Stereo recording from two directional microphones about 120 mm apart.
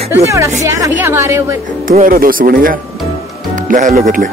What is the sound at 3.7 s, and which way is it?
Speech, 90° right.